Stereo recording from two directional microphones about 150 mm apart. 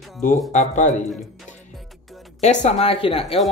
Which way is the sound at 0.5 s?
55° left (ahead or behind).